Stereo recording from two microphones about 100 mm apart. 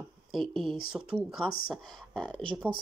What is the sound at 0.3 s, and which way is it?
Speech, centre (ahead or behind).